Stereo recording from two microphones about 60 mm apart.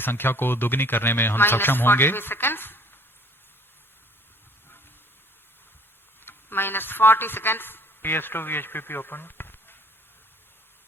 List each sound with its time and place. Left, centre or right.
0.0 s speech: left
6.2 s speech: left